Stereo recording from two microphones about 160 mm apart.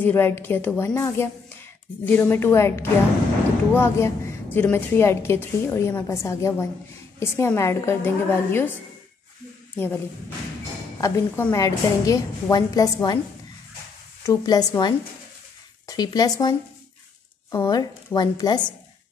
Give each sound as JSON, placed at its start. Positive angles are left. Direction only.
{"t": 0.0, "sound": "a woman's voice", "side_deg": 15}
{"t": 11.0, "sound": "a woman's voice", "side_deg": 20}
{"t": 14.2, "sound": "a woman's voice", "side_deg": 25}